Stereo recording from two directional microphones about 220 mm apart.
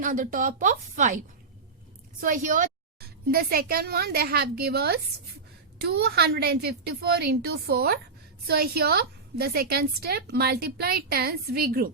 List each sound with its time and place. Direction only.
0.0 s speech: 40° right (ahead or behind)
2.2 s a woman's voice: 35° right (ahead or behind)